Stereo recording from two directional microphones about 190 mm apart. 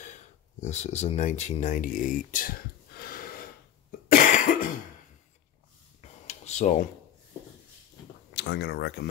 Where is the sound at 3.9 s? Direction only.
45° left (ahead or behind).